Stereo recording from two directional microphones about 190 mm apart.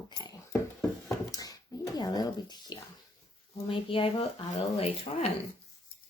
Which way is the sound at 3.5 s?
30° left (ahead or behind).